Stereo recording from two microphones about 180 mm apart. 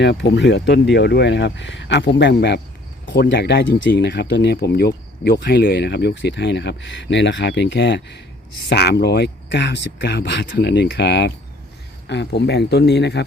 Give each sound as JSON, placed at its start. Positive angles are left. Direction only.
{"t": 0.0, "sound": "speech", "side_deg": 75}
{"t": 8.7, "sound": "speech", "side_deg": 65}